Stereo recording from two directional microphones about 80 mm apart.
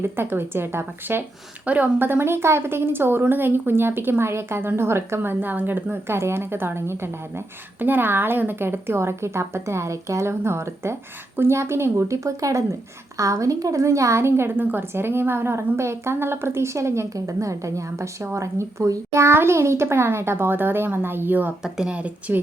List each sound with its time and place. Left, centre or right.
0.0 s a woman's voice: right
1.6 s a woman's voice: centre
21.6 s speech: centre